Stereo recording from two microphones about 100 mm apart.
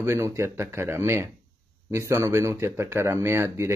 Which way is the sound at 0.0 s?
25° right (ahead or behind).